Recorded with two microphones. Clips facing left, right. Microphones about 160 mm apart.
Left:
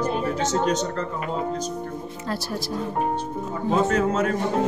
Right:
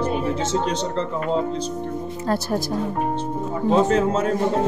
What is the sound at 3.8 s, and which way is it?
Speech, 30° right (ahead or behind).